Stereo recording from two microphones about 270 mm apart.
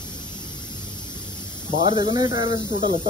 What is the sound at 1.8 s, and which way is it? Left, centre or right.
Speech, centre.